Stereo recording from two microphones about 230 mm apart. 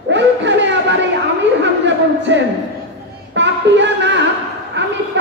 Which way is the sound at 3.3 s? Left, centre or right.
Right.